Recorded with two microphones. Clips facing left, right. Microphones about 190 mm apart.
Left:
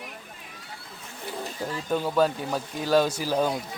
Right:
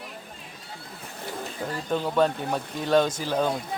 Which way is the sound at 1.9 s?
5° left (ahead or behind).